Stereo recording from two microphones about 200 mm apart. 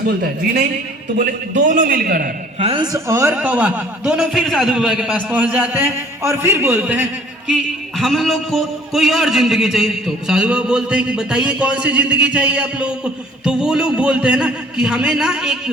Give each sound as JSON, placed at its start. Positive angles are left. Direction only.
{"t": 1.2, "sound": "a man's voice", "side_deg": -40}
{"t": 2.6, "sound": "a man's voice", "side_deg": -25}